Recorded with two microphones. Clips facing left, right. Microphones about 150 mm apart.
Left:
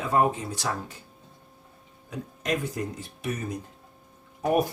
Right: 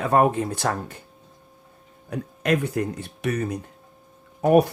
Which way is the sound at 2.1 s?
65° right (ahead or behind).